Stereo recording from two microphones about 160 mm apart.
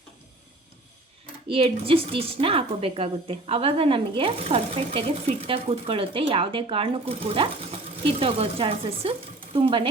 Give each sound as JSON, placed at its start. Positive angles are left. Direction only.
{"t": 1.5, "sound": "a woman's voice", "side_deg": -35}